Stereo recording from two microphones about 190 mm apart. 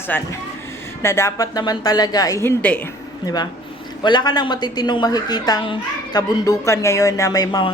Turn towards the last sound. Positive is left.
turn(degrees=20)  # may be behind; listen again after turning